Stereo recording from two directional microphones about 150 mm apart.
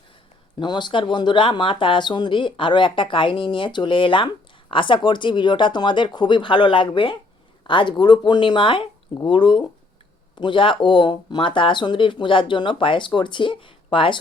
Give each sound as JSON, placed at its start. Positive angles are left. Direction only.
{"t": 0.6, "sound": "speech", "side_deg": 30}